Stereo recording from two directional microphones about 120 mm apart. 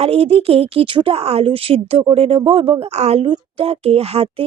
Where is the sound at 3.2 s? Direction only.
50° right (ahead or behind).